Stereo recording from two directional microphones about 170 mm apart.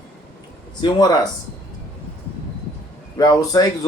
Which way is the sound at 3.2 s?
20° left (ahead or behind).